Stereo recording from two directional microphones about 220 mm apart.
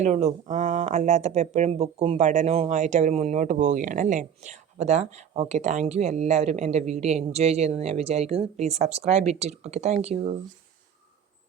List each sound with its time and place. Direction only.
0.0 s speech: 30° right (ahead or behind)